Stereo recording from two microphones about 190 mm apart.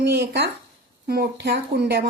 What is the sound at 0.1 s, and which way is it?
A woman's voice, 60° right (ahead or behind).